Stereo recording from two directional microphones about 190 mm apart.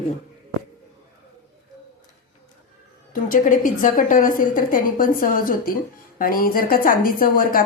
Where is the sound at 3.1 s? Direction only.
45° left (ahead or behind).